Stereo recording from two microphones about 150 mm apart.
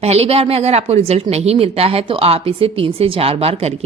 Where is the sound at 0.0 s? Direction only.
45° right (ahead or behind).